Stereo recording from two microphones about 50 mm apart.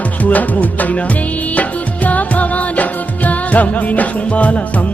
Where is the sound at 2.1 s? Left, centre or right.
Left.